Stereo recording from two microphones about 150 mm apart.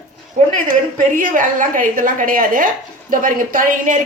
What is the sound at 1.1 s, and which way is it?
A woman's voice, 60° right (ahead or behind).